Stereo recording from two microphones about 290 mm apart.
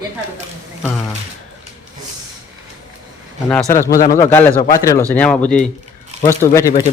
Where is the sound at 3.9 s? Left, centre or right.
Left.